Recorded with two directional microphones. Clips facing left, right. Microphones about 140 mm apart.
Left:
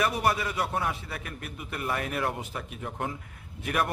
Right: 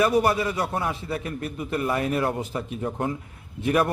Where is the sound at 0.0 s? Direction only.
30° right (ahead or behind).